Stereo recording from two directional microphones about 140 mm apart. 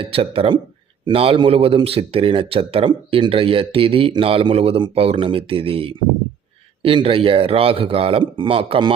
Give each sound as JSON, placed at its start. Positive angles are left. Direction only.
{"t": 0.0, "sound": "a man's voice", "side_deg": -40}